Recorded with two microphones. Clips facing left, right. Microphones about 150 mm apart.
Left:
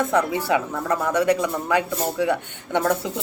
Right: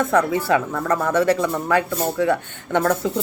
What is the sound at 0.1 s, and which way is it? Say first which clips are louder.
A man's voice: right 2 dB; 15° left (ahead or behind).